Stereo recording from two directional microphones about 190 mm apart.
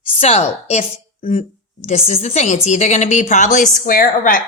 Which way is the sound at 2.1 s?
35° left (ahead or behind).